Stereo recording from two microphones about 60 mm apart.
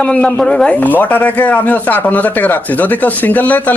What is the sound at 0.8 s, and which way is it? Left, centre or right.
A man's voice, left.